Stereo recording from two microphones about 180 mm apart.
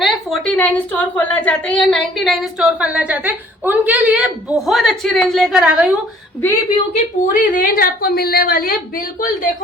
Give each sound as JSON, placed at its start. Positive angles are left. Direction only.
{"t": 0.0, "sound": "a woman's voice", "side_deg": 0}
{"t": 6.9, "sound": "a woman's voice", "side_deg": 45}